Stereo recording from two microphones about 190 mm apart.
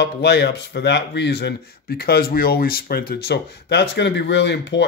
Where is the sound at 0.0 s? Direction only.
60° left (ahead or behind).